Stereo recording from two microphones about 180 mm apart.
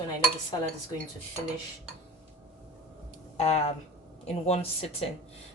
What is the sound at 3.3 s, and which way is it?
Speech, 35° left (ahead or behind).